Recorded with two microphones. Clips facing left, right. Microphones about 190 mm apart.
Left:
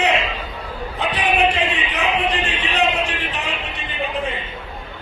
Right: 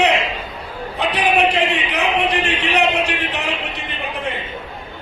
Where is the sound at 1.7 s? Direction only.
80° right.